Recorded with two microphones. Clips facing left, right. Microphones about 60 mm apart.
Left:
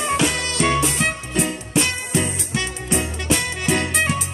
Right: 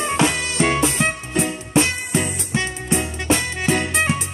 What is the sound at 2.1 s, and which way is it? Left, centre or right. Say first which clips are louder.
Music: right 1 dB; centre.